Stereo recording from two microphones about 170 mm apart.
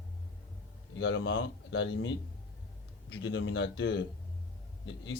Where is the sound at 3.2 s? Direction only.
90° left.